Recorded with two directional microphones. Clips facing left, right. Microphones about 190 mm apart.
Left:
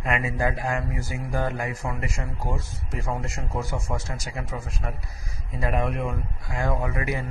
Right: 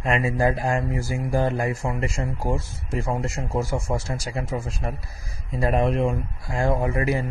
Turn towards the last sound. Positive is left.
turn(degrees=-30)  # may be behind; listen again after turning